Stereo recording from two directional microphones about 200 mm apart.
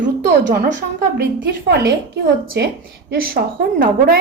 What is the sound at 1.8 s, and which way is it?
A woman's voice, 55° right (ahead or behind).